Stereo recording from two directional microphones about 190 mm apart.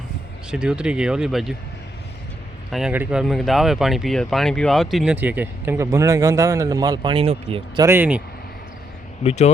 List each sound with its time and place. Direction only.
0.5 s speech: 5° right (ahead or behind)
2.7 s speech: 5° right (ahead or behind); by 7.9 s 30° right (ahead or behind)
7.9 s speech: 10° right (ahead or behind)
9.2 s speech: 35° left (ahead or behind)